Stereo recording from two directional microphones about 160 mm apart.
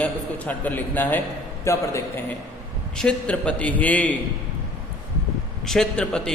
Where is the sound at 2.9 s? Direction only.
5° left (ahead or behind).